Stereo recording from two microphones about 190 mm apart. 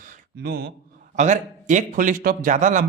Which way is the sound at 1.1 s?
40° right (ahead or behind).